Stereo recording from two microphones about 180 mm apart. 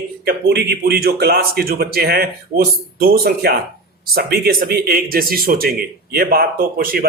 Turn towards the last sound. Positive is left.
turn(degrees=-55)  # may be behind; listen again after turning